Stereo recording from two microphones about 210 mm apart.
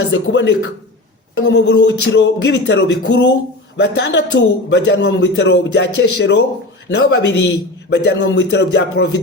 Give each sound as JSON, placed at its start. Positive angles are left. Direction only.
{"t": 0.1, "sound": "a capella", "side_deg": 60}
{"t": 3.8, "sound": "a man's voice", "side_deg": 55}